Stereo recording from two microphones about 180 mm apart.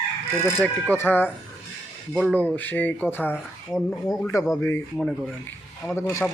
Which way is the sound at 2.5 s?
10° left (ahead or behind).